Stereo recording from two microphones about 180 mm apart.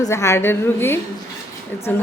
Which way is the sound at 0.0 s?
15° left (ahead or behind).